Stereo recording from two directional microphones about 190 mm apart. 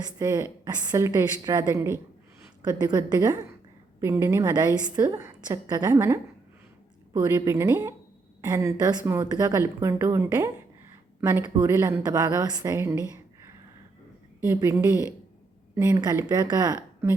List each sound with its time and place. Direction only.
0.2 s a woman's voice: 20° right (ahead or behind)
14.5 s a woman's voice: 10° right (ahead or behind)